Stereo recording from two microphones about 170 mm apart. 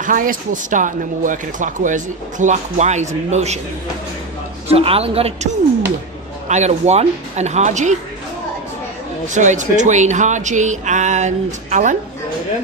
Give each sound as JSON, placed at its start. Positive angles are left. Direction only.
{"t": 0.0, "sound": "speech", "side_deg": -55}
{"t": 4.7, "sound": "speech", "side_deg": -35}
{"t": 6.5, "sound": "speech", "side_deg": -40}
{"t": 9.3, "sound": "speech", "side_deg": -45}